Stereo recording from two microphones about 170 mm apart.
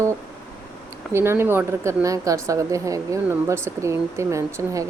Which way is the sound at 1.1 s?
15° right (ahead or behind).